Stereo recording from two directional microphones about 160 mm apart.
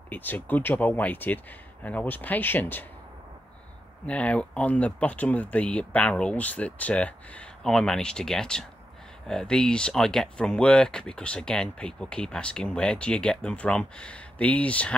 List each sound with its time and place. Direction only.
0.1 s speech: 10° left (ahead or behind)
4.0 s speech: 10° left (ahead or behind)